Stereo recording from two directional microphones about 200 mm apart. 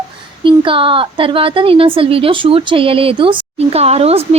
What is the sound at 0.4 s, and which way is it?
A woman's voice, 25° right (ahead or behind).